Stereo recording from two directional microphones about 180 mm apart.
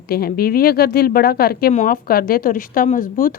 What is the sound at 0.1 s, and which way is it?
A woman's voice, 55° left (ahead or behind).